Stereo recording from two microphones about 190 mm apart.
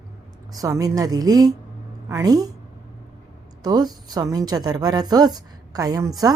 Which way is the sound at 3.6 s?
20° right (ahead or behind).